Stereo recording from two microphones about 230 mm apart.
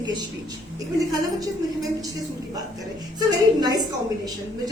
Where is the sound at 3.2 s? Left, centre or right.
Centre.